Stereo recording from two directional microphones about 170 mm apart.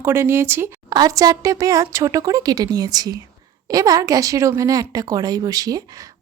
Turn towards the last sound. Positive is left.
turn(degrees=-20)  # may be behind; listen again after turning